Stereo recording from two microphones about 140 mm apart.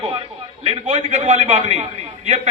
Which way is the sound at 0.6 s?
55° right (ahead or behind).